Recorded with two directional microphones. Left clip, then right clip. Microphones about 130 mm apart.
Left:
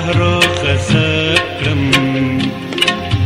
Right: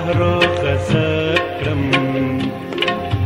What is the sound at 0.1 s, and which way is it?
Music, 40° right (ahead or behind).